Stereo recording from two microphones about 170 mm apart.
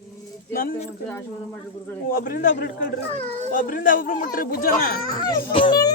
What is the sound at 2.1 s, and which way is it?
Speech, 55° left (ahead or behind).